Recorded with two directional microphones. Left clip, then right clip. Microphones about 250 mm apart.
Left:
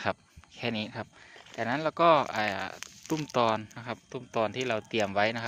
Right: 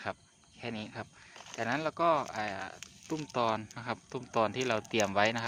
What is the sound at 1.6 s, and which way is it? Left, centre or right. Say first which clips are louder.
Speech: left 5 dB; left.